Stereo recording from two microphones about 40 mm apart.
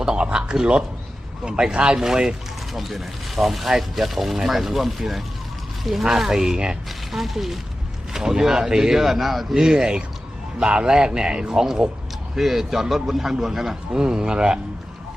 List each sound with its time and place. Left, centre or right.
0.0 s speech: right
2.0 s speech: centre
2.7 s speech: centre
9.6 s speech: centre
12.4 s speech: centre